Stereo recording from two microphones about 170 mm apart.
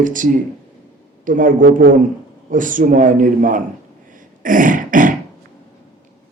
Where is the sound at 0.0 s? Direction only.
50° right (ahead or behind).